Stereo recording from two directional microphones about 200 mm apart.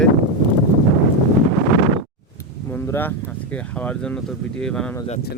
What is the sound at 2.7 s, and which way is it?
Speech, 10° left (ahead or behind).